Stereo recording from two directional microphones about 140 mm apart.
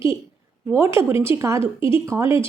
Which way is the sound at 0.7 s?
20° right (ahead or behind).